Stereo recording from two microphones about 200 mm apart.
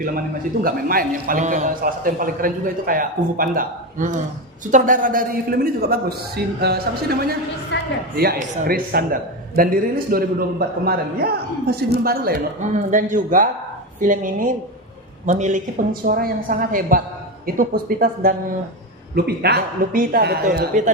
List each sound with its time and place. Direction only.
0.6 s a man's voice: 45° right (ahead or behind)
7.7 s a sound: 60° left (ahead or behind)
8.1 s a man's voice: 50° right (ahead or behind)